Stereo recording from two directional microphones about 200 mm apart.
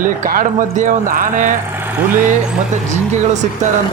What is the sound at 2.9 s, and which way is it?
Speech, 35° right (ahead or behind).